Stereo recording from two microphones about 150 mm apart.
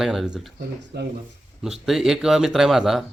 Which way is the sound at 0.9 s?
90° right.